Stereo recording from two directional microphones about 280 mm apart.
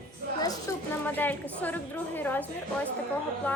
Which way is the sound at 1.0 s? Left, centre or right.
Centre.